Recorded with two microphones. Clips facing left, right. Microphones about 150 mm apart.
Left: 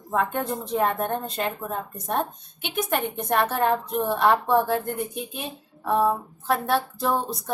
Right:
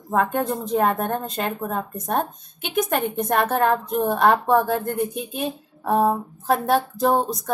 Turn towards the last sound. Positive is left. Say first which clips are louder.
# right 5 dB
turn(degrees=-45)  # may be behind; listen again after turning